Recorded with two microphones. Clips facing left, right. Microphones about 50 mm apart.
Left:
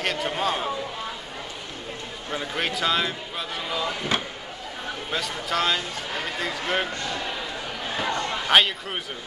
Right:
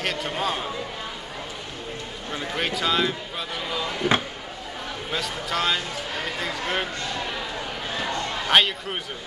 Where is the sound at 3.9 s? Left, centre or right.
Right.